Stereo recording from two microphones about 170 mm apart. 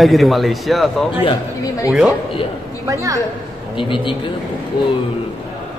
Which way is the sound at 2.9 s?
20° right (ahead or behind).